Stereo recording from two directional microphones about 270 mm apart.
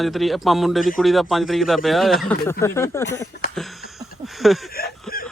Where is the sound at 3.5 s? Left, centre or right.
Centre.